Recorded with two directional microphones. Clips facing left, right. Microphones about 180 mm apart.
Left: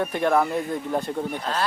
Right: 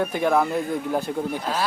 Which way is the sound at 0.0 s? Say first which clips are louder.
Even; centre (ahead or behind).